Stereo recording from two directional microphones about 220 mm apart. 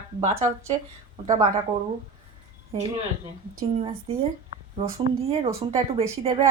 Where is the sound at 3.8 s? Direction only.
25° right (ahead or behind).